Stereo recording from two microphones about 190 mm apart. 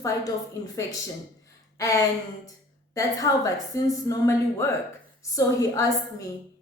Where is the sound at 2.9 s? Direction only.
20° left (ahead or behind).